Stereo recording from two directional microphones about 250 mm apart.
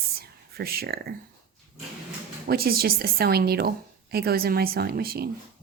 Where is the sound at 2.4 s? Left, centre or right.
Right.